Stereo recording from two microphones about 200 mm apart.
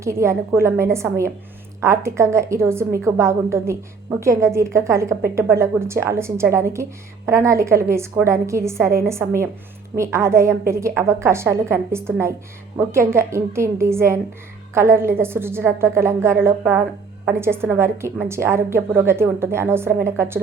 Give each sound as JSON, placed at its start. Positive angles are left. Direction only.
{"t": 0.0, "sound": "a woman's voice", "side_deg": -15}